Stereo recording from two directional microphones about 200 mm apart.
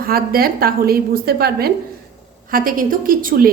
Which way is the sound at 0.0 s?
45° right (ahead or behind).